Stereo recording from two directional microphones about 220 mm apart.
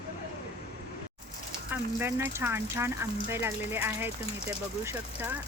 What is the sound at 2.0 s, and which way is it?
Speech, 10° right (ahead or behind).